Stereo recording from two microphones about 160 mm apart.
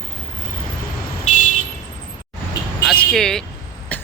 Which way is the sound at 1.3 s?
50° left (ahead or behind).